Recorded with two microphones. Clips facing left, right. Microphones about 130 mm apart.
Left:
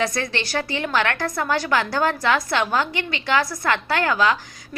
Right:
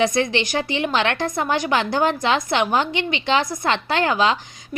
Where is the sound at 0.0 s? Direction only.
20° right (ahead or behind).